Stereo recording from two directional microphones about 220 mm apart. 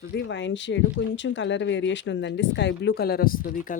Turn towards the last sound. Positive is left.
turn(degrees=40)  # may be behind; listen again after turning